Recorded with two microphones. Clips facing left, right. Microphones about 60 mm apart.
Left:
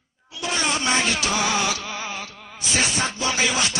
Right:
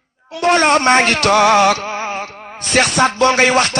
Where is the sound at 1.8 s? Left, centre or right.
Right.